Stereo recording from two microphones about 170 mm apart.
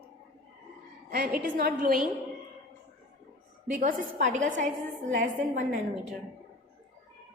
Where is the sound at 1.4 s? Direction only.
55° right (ahead or behind).